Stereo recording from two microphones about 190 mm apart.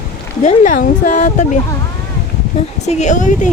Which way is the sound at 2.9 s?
40° left (ahead or behind).